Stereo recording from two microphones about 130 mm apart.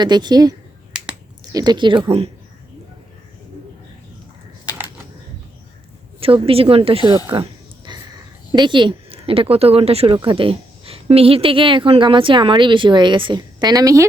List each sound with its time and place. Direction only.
0.0 s a woman's voice: 35° right (ahead or behind)
0.9 s finger snapping: 5° right (ahead or behind)
1.5 s a woman's voice: 35° right (ahead or behind)
6.1 s speech: 45° right (ahead or behind)
7.9 s a sound: 35° right (ahead or behind)
8.5 s a woman's voice: 40° right (ahead or behind)